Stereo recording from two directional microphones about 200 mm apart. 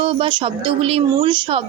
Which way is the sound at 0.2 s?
25° right (ahead or behind).